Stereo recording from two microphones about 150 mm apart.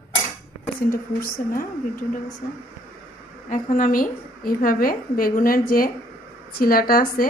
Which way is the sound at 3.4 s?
60° left (ahead or behind).